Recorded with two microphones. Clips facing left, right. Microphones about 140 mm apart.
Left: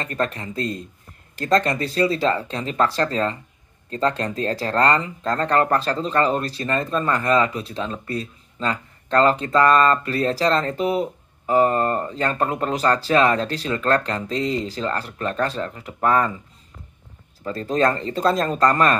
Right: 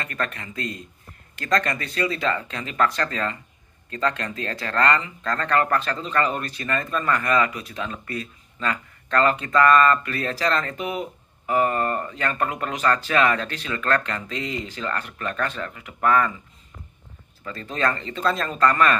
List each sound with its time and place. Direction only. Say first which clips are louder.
0.0 s speech: left 5 dB; 30° left (ahead or behind)
17.4 s speech: left 6 dB; 35° left (ahead or behind)